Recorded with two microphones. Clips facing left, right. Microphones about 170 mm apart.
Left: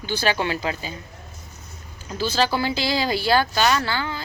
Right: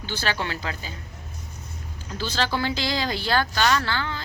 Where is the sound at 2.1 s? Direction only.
10° left (ahead or behind).